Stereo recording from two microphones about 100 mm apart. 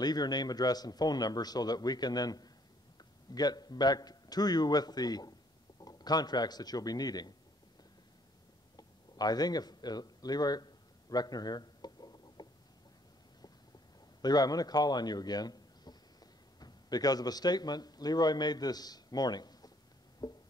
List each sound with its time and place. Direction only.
0.0 s a man's voice: 45° left (ahead or behind)
8.7 s a sound: 40° left (ahead or behind)
14.2 s speech: 40° left (ahead or behind)
20.2 s music: 40° left (ahead or behind)